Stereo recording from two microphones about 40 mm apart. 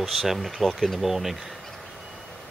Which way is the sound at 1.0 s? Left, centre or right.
Centre.